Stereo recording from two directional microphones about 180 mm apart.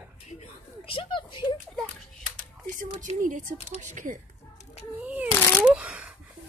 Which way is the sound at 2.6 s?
45° right (ahead or behind).